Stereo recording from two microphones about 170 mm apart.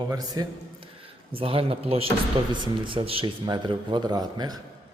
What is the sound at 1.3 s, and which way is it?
Speech, 35° right (ahead or behind).